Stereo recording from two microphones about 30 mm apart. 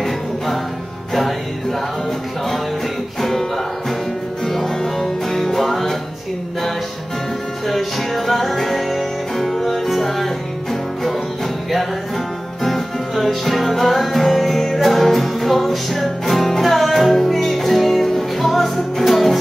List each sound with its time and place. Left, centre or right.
3.2 s music: centre
7.6 s music: centre
13.1 s music: centre